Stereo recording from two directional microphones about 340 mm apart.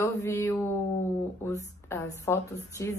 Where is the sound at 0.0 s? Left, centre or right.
Centre.